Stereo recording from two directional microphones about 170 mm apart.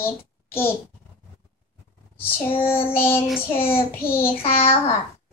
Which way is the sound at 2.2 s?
30° left (ahead or behind).